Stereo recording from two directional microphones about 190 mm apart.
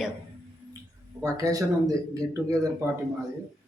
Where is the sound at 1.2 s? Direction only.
15° right (ahead or behind).